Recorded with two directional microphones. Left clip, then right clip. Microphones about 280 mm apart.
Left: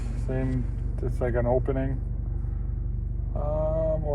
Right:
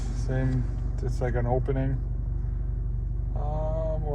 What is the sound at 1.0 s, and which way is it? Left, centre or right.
Speech, left.